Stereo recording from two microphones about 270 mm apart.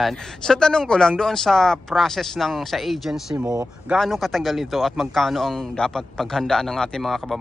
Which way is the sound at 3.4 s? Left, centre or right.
Centre.